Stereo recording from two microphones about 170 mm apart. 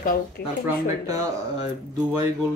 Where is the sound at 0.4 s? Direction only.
70° left (ahead or behind).